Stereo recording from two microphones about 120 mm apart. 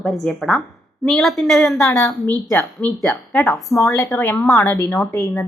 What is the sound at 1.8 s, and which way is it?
Speech, 25° left (ahead or behind).